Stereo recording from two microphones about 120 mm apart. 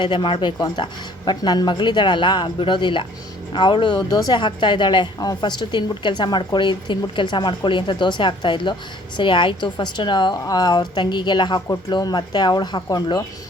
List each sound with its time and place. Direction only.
0.0 s a woman's voice: 40° left (ahead or behind)